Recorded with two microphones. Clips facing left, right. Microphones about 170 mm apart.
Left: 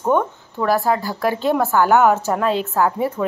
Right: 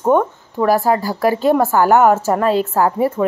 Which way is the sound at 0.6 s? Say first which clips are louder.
Right 4 dB; 40° right (ahead or behind).